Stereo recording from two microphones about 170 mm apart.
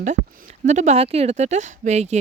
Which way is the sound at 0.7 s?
40° right (ahead or behind).